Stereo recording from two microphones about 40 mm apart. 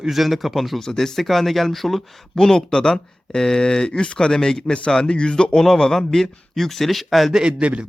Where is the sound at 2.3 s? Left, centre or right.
Centre.